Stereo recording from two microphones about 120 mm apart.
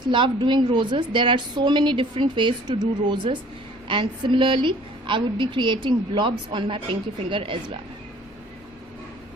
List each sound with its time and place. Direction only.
0.1 s a woman's voice: 45° right (ahead or behind)